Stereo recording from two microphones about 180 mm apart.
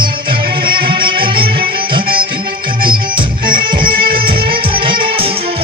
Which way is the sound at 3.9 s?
55° right (ahead or behind).